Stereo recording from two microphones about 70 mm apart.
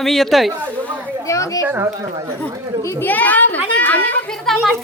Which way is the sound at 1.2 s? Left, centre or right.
Left.